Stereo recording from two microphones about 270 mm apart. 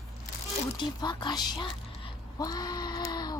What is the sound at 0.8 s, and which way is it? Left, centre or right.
Speech, centre.